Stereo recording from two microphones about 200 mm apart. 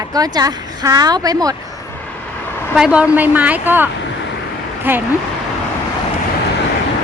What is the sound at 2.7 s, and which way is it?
A woman's voice, 5° right (ahead or behind).